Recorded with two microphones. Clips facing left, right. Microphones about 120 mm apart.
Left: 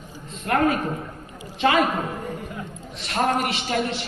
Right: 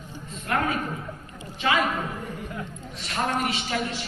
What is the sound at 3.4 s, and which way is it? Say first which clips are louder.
Speech: left 3 dB; 70° left (ahead or behind).